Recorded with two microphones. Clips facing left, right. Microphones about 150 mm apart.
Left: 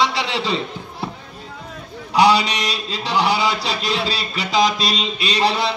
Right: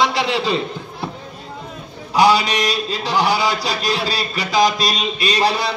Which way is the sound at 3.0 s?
25° left (ahead or behind).